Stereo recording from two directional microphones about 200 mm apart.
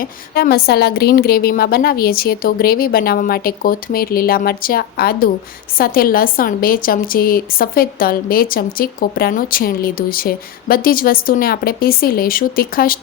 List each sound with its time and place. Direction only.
0.0 s a woman's voice: 45° left (ahead or behind)